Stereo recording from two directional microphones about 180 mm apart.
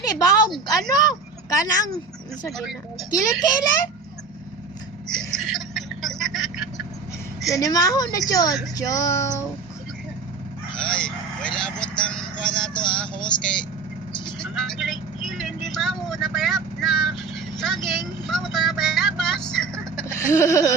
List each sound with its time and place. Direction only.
0.0 s a woman's voice: 20° left (ahead or behind)
1.5 s a woman's voice: 20° left (ahead or behind)
2.5 s speech: centre (ahead or behind)
3.1 s a woman's voice: 20° left (ahead or behind)
5.3 s vehicle: centre (ahead or behind)
7.5 s a woman's voice: 20° left (ahead or behind)
8.7 s music: 20° left (ahead or behind)
10.8 s vehicle: 5° left (ahead or behind)
14.3 s speech: centre (ahead or behind)
19.5 s vehicle: 5° left (ahead or behind)
20.1 s music: 15° left (ahead or behind)